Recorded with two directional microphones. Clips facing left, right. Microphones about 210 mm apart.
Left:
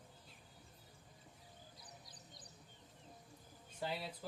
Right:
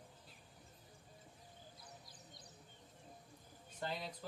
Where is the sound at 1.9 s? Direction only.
25° right (ahead or behind).